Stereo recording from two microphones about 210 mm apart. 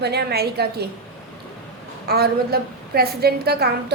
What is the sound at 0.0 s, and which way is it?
Speech, 50° right (ahead or behind).